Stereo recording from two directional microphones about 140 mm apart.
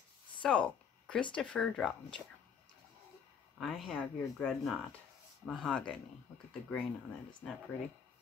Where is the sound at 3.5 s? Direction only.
Centre (ahead or behind).